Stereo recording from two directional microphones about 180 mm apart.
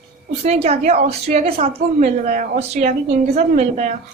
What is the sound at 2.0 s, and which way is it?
A woman's voice, 45° right (ahead or behind).